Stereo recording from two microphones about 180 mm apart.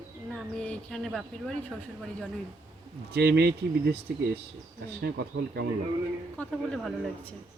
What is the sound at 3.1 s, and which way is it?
Speech, 65° right (ahead or behind).